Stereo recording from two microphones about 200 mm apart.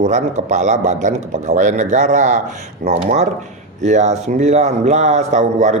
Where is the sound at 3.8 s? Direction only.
35° right (ahead or behind).